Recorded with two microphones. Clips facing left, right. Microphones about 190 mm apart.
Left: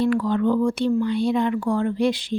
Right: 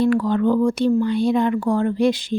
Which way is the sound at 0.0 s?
45° right (ahead or behind).